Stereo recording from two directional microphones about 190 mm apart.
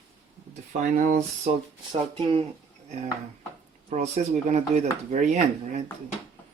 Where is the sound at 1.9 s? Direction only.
25° right (ahead or behind).